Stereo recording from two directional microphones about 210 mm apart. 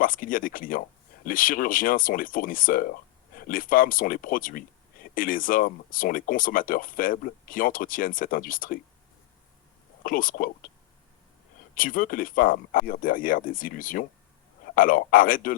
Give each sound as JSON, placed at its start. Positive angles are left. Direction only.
{"t": 0.0, "sound": "speech", "side_deg": 40}
{"t": 10.0, "sound": "speech", "side_deg": 40}
{"t": 11.7, "sound": "speech", "side_deg": 40}